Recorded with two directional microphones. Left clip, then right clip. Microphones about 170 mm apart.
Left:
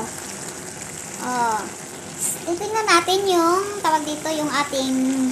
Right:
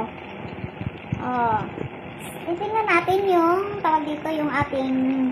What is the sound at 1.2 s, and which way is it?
A child's voice, 15° left (ahead or behind).